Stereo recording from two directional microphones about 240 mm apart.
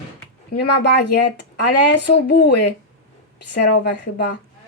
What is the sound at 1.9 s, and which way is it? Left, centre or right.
Speech, left.